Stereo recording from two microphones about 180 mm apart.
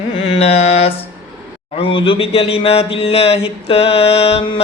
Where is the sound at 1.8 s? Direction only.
30° left (ahead or behind).